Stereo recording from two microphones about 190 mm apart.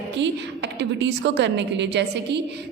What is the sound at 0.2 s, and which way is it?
A woman's voice, 65° right (ahead or behind).